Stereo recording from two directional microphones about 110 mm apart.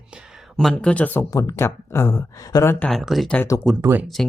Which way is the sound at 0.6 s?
5° left (ahead or behind).